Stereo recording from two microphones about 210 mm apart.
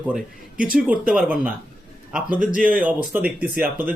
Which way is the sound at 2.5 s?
40° right (ahead or behind).